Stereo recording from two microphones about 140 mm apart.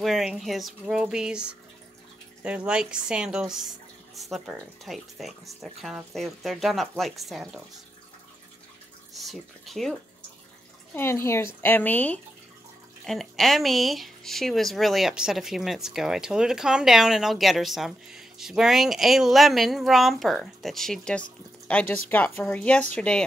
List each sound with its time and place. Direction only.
0.0 s speech: centre (ahead or behind)
9.1 s speech: centre (ahead or behind)
11.0 s speech: 20° left (ahead or behind)
13.0 s speech: centre (ahead or behind)